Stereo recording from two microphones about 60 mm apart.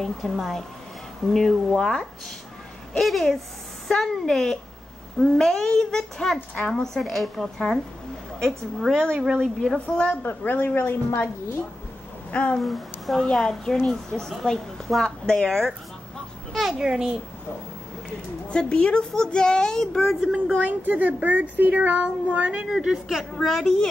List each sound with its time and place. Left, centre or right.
0.0 s a woman's voice: centre
3.0 s a woman's voice: centre
10.2 s speech: left
12.3 s speech: left
12.5 s speech: centre
13.2 s a woman's voice: centre
16.5 s a child's voice: centre
18.5 s a woman's voice: centre
20.1 s a woman's voice: centre
20.3 s a child's voice: right
22.7 s a child's voice: centre